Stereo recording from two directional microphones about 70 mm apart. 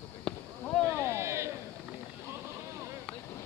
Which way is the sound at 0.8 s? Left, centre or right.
Right.